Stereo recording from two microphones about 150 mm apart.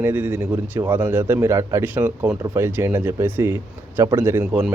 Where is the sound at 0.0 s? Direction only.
15° right (ahead or behind).